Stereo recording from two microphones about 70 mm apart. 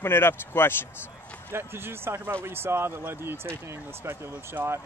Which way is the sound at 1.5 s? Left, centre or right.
Right.